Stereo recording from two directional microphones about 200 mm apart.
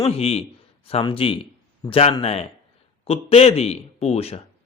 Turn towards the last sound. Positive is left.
turn(degrees=30)  # may be behind; listen again after turning